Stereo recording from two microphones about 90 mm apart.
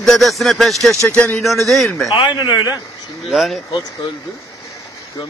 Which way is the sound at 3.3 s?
Centre (ahead or behind).